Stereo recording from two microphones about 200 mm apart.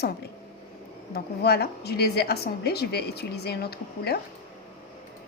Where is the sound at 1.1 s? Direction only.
55° left (ahead or behind).